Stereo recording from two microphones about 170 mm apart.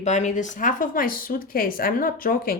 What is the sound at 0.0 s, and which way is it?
Speech, 45° left (ahead or behind).